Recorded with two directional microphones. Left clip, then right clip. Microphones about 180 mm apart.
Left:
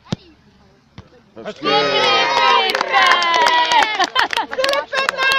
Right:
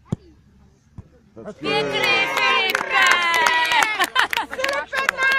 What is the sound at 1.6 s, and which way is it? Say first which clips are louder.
Crowd: left 5 dB; 25° left (ahead or behind).